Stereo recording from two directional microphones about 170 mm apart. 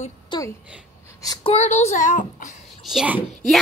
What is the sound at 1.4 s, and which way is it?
A woman's voice, 40° left (ahead or behind).